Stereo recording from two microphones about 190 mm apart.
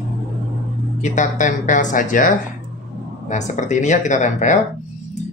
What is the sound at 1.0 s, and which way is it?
Speech, 40° left (ahead or behind).